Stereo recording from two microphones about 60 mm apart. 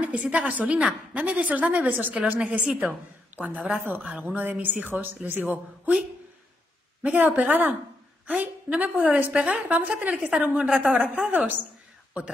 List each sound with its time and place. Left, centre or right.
0.0 s a woman's voice: right
7.0 s a woman's voice: right
9.3 s a woman's voice: centre